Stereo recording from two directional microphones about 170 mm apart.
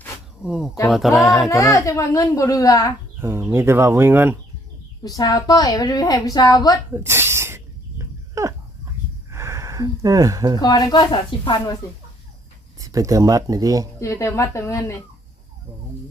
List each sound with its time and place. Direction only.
0.4 s speech: 5° right (ahead or behind)
1.5 s a woman's voice: 20° left (ahead or behind)
3.2 s speech: 15° right (ahead or behind)
5.0 s a woman's voice: 20° left (ahead or behind)
6.9 s a sound: 15° right (ahead or behind)
9.3 s speech: 15° right (ahead or behind)
10.6 s a woman's voice: 25° left (ahead or behind)
11.8 s a woman's voice: 20° left (ahead or behind)
12.8 s speech: 20° right (ahead or behind)
14.0 s a woman's voice: 15° left (ahead or behind)